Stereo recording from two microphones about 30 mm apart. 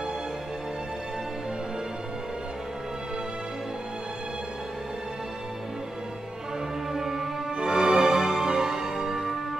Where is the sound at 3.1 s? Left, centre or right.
Right.